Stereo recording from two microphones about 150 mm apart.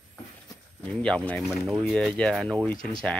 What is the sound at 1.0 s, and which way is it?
Speech, 5° left (ahead or behind).